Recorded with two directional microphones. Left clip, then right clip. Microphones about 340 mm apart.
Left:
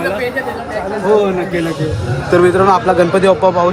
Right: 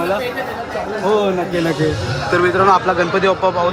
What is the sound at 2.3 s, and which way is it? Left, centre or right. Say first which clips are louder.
A man's voice: left 3 dB; centre.